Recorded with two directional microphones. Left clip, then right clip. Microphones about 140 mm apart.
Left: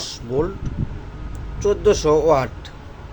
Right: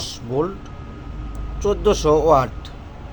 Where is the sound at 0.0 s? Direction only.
Centre (ahead or behind).